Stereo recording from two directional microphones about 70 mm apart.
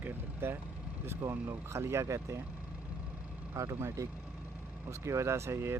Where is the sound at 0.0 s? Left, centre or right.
Right.